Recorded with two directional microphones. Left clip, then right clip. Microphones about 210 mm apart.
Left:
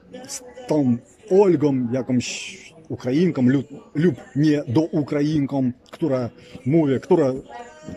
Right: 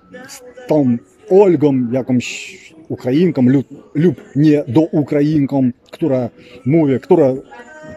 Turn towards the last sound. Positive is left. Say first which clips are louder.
# right 7 dB
turn(degrees=-15)  # may be behind; listen again after turning